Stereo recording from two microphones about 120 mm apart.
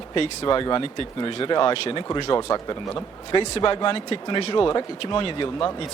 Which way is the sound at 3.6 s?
45° left (ahead or behind).